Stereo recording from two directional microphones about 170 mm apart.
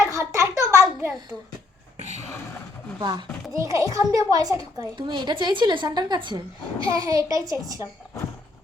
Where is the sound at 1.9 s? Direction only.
40° right (ahead or behind).